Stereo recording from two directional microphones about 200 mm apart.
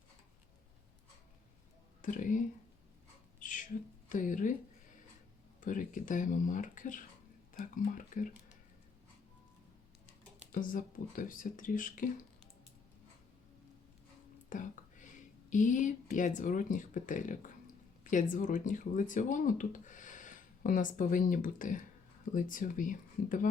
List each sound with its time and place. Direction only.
2.0 s speech: 40° left (ahead or behind)
3.4 s a sound: 40° left (ahead or behind)
4.1 s speech: 40° left (ahead or behind)
5.5 s speech: 40° left (ahead or behind)
10.5 s speech: 40° left (ahead or behind)
14.5 s whispering: 40° left (ahead or behind)
15.4 s speech: 40° left (ahead or behind)